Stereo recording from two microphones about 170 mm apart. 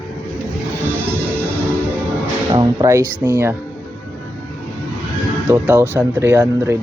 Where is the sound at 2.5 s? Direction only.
20° right (ahead or behind).